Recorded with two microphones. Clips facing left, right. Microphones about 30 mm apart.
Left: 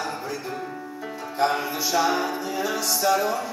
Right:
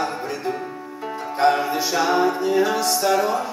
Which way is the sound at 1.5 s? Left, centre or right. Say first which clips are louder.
Right 3 dB; centre.